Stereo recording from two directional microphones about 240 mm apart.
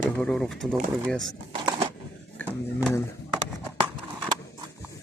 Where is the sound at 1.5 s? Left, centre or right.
Right.